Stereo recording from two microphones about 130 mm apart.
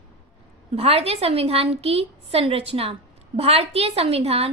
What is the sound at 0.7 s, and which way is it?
A woman's voice, 50° right (ahead or behind).